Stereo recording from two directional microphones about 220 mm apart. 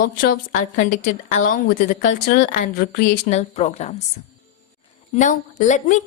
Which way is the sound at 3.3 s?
30° left (ahead or behind).